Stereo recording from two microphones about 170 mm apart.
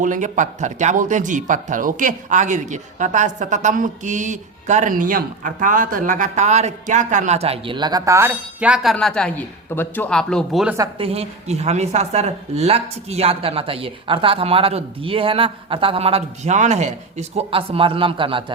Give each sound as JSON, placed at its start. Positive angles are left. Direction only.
{"t": 0.0, "sound": "speech", "side_deg": -50}
{"t": 10.9, "sound": "a woman's voice", "side_deg": -35}